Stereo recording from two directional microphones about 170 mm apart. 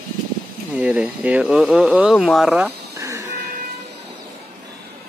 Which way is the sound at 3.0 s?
20° right (ahead or behind).